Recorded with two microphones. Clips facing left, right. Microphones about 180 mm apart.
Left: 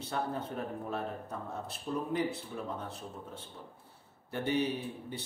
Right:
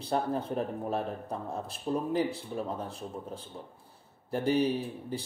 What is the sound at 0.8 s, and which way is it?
Speech, 30° right (ahead or behind).